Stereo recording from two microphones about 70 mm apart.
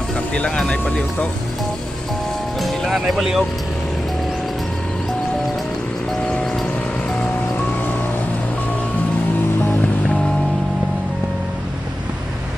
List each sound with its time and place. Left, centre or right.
0.3 s speech: centre
2.6 s speech: centre
6.2 s vehicle: centre